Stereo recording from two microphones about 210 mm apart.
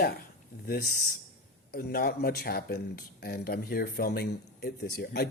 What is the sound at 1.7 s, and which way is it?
Speech, 45° left (ahead or behind).